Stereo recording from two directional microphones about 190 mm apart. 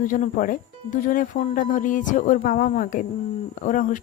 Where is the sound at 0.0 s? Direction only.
45° left (ahead or behind).